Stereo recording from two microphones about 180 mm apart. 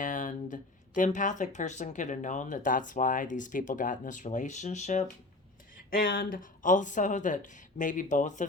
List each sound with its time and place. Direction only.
0.0 s speech: 45° left (ahead or behind)
5.9 s speech: 55° left (ahead or behind)